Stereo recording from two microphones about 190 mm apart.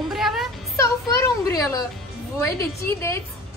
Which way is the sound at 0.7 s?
15° left (ahead or behind).